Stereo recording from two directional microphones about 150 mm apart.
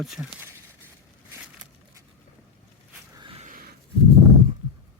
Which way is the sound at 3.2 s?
35° right (ahead or behind).